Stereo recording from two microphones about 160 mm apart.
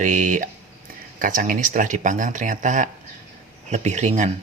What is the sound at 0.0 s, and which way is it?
Speech, 50° right (ahead or behind).